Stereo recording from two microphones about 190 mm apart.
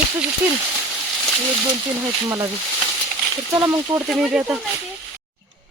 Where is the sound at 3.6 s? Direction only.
15° right (ahead or behind).